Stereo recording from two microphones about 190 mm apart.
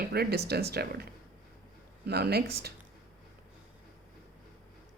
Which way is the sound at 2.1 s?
55° right (ahead or behind).